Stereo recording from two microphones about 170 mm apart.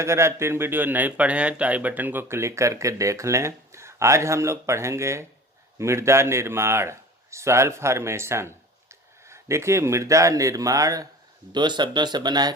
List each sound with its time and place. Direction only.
0.0 s speech: 15° right (ahead or behind)